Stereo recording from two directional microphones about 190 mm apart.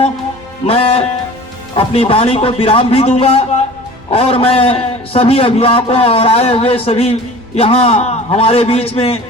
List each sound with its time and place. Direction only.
0.7 s a man's voice: 30° left (ahead or behind)